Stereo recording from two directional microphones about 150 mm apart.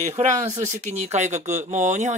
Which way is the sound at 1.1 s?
50° right (ahead or behind).